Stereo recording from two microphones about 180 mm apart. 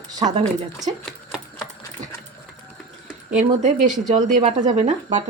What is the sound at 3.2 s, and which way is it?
Speech, 45° right (ahead or behind).